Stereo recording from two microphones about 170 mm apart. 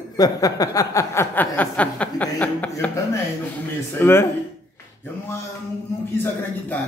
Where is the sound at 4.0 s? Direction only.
15° left (ahead or behind).